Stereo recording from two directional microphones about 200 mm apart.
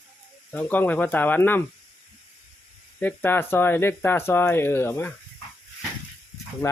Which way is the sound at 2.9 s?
10° left (ahead or behind).